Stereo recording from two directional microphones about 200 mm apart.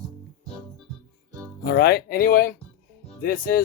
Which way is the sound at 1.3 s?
15° right (ahead or behind).